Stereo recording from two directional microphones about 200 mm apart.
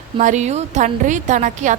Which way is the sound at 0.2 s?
35° right (ahead or behind).